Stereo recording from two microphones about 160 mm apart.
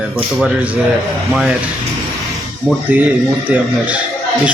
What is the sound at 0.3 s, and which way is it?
A man's voice, 5° right (ahead or behind).